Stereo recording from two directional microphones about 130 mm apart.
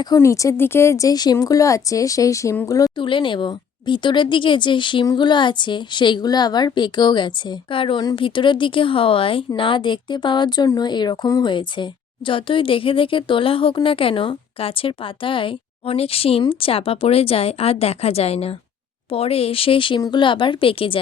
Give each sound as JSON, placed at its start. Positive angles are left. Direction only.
{"t": 0.0, "sound": "a woman's voice", "side_deg": 25}
{"t": 3.0, "sound": "a woman's voice", "side_deg": 40}